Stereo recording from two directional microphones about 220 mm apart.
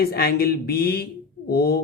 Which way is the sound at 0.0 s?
45° left (ahead or behind).